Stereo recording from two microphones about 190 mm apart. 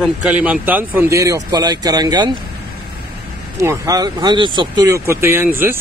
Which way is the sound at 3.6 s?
15° right (ahead or behind).